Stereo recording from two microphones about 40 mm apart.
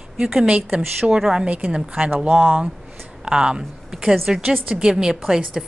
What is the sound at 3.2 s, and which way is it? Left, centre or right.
A woman's voice, centre.